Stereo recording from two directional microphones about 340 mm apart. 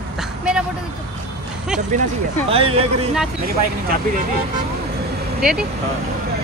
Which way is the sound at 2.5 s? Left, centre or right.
Centre.